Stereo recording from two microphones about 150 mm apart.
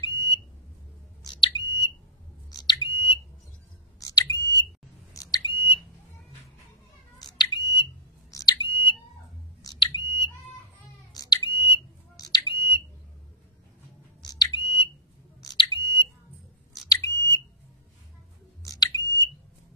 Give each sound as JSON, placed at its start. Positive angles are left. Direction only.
{"t": 0.0, "sound": "smoke detector", "side_deg": 30}
{"t": 7.2, "sound": "smoke detector", "side_deg": 25}
{"t": 11.1, "sound": "a sound", "side_deg": 30}
{"t": 14.2, "sound": "smoke detector", "side_deg": 30}
{"t": 16.9, "sound": "smoke detector", "side_deg": 20}
{"t": 18.6, "sound": "a sound", "side_deg": 25}